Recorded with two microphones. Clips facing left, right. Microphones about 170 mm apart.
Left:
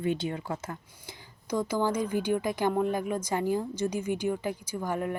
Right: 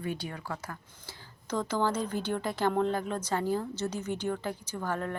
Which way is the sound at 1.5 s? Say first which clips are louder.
Left 2 dB; 10° left (ahead or behind).